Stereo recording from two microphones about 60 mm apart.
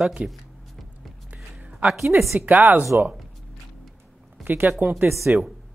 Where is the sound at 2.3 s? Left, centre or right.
Right.